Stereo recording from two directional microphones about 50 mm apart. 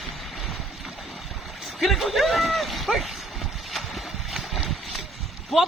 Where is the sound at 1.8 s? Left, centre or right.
Centre.